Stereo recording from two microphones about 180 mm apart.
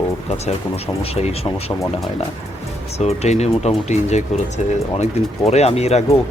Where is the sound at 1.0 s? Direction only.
35° left (ahead or behind).